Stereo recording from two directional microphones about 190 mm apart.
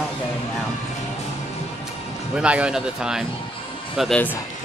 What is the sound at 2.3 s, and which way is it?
Speech, 5° right (ahead or behind).